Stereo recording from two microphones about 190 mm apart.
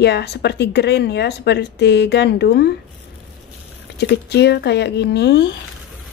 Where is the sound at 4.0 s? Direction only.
60° left (ahead or behind).